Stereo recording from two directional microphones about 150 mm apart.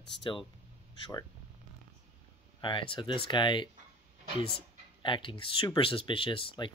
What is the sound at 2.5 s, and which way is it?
Speech, 35° left (ahead or behind).